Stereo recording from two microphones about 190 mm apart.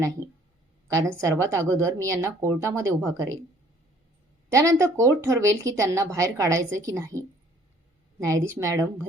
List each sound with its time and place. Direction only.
0.2 s speech: 15° right (ahead or behind)
4.5 s speech: 15° right (ahead or behind)